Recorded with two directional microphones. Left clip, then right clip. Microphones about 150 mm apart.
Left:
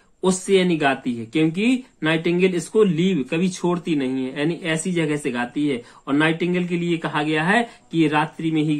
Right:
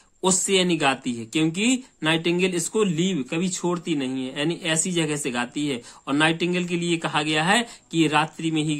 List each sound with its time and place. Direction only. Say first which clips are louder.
0.2 s speech: left 3 dB; 35° right (ahead or behind)